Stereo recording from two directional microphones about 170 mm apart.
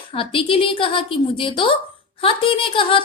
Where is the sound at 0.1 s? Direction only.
30° left (ahead or behind).